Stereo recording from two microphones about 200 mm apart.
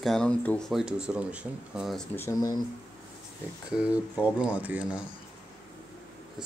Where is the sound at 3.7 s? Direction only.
5° right (ahead or behind).